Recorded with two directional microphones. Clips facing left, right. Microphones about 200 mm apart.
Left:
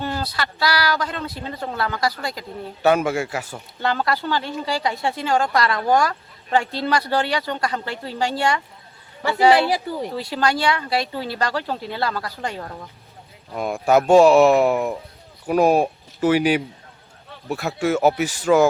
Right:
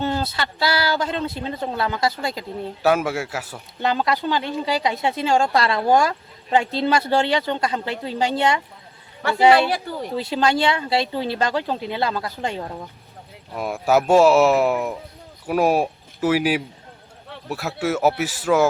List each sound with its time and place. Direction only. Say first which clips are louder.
0.0 s speech: right 2 dB; 25° right (ahead or behind)
2.8 s speech: left 2 dB; centre (ahead or behind)
3.8 s speech: right 1 dB; 20° right (ahead or behind)
10.2 s speech: right 4 dB; 20° right (ahead or behind)
13.5 s speech: left 1 dB; 5° right (ahead or behind)